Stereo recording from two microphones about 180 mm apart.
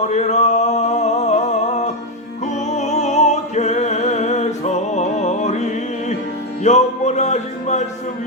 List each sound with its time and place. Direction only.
0.0 s a sound: 40° left (ahead or behind)
2.7 s opera: 40° left (ahead or behind)
6.6 s music: 40° left (ahead or behind)